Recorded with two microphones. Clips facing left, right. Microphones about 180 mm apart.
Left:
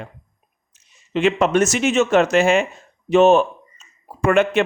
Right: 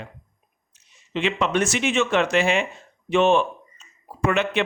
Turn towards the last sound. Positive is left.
turn(degrees=50)  # may be behind; listen again after turning